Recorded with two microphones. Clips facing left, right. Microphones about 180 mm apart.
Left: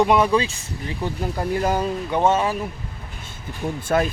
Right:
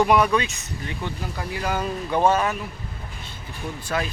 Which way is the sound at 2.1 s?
20° left (ahead or behind).